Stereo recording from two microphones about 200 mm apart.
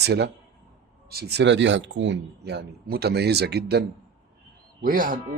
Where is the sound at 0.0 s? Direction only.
55° right (ahead or behind).